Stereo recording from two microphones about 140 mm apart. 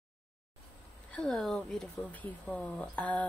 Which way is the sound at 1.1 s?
5° left (ahead or behind).